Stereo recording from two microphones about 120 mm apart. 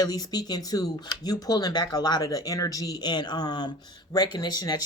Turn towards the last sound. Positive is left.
turn(degrees=35)  # may be behind; listen again after turning